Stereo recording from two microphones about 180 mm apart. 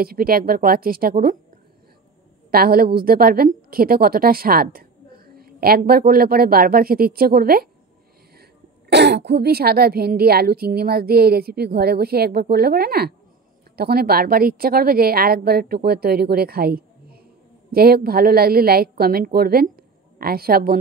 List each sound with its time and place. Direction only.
0.0 s a woman's voice: 55° right (ahead or behind)
2.5 s a woman's voice: 55° right (ahead or behind)
8.9 s a woman's voice: 70° right (ahead or behind)